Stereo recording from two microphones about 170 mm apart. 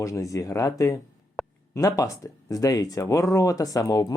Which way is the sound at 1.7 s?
20° left (ahead or behind).